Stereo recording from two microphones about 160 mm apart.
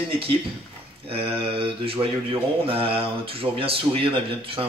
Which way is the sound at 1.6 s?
35° right (ahead or behind).